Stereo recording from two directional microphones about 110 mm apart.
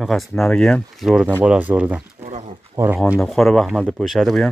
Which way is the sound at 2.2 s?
90° right.